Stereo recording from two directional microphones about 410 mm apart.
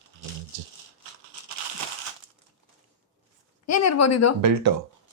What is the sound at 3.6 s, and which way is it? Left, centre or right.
Speech, left.